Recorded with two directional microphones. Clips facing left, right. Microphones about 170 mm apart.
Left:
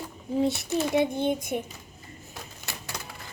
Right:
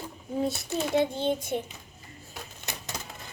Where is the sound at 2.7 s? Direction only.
20° right (ahead or behind).